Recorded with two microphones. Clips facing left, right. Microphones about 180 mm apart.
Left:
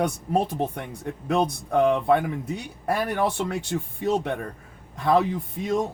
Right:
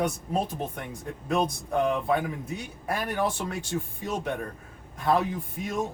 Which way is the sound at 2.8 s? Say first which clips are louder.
Left 4 dB; 65° left (ahead or behind).